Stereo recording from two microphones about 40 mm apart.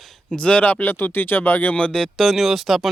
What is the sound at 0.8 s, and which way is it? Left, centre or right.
Speech, left.